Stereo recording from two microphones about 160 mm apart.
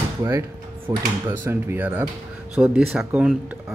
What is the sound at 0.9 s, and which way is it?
Speech, 20° right (ahead or behind).